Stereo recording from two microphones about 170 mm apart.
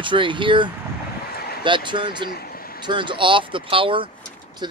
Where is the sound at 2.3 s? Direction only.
60° left (ahead or behind).